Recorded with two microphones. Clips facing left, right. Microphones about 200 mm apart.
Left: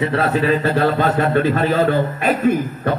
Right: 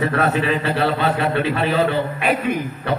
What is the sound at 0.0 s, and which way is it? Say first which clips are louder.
A man's voice: left 2 dB; 30° left (ahead or behind).